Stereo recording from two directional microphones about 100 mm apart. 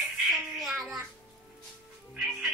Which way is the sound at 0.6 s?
Centre (ahead or behind).